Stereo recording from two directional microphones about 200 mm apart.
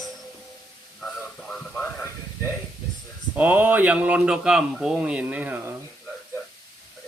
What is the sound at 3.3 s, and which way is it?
A man's voice, 10° right (ahead or behind).